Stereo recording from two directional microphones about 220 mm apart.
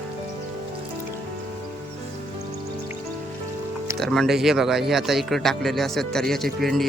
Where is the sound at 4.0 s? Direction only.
Centre (ahead or behind).